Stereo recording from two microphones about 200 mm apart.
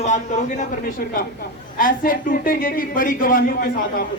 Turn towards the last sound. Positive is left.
turn(degrees=45)  # may be behind; listen again after turning